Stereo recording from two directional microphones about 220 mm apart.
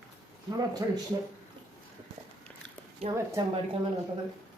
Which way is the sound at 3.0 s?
25° right (ahead or behind).